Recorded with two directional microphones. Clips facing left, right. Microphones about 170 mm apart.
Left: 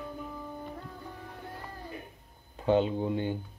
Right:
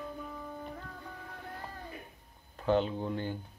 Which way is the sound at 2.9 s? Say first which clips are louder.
Left 5 dB; 15° left (ahead or behind).